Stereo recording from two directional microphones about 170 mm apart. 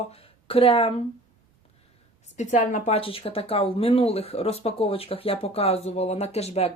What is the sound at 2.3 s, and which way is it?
Speech, 45° left (ahead or behind).